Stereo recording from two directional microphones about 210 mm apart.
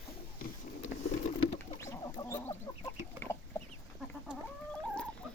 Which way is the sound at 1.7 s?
15° left (ahead or behind).